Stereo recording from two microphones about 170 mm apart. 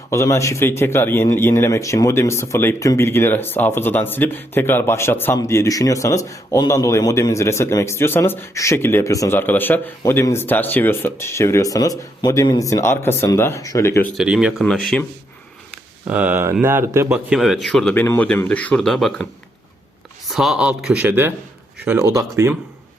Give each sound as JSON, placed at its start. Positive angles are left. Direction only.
{"t": 0.1, "sound": "speech", "side_deg": 15}
{"t": 14.2, "sound": "speech", "side_deg": -5}
{"t": 16.0, "sound": "speech", "side_deg": -10}